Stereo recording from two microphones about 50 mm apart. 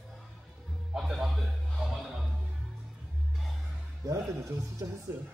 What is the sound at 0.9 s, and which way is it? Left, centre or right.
Music, centre.